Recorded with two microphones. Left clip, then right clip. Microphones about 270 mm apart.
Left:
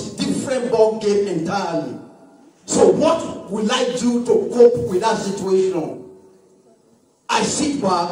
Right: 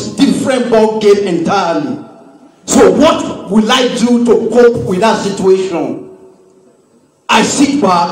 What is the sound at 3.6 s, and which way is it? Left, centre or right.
Speech, right.